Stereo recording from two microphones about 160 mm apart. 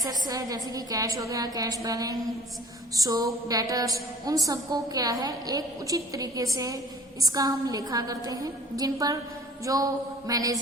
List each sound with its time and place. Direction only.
0.0 s a woman's voice: 25° right (ahead or behind)